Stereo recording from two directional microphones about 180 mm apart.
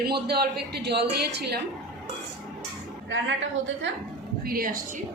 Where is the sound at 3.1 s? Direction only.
90° right.